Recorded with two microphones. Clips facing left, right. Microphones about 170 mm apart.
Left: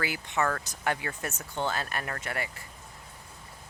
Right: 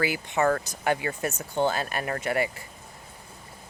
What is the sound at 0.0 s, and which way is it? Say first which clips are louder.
Speech: right 5 dB; 5° right (ahead or behind).